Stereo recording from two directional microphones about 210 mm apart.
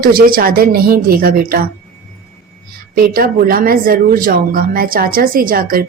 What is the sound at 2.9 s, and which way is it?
Speech, 45° right (ahead or behind).